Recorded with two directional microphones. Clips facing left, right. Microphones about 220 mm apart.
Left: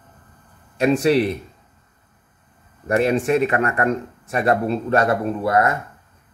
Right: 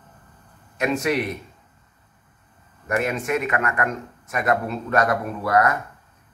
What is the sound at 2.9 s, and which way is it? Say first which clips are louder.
Speech: left 6 dB; 30° left (ahead or behind).